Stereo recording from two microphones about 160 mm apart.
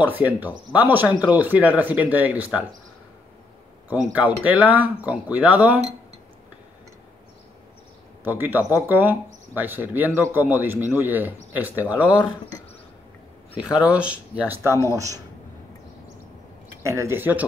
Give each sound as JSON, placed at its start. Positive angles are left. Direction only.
{"t": 0.0, "sound": "speech", "side_deg": -10}
{"t": 4.1, "sound": "speech", "side_deg": -10}
{"t": 8.2, "sound": "a man's voice", "side_deg": -10}
{"t": 13.6, "sound": "speech", "side_deg": -5}
{"t": 16.8, "sound": "speech", "side_deg": -20}